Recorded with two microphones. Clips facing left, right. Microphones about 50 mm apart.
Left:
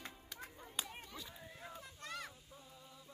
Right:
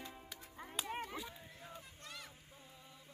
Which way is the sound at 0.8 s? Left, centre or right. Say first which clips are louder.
Right 9 dB; right.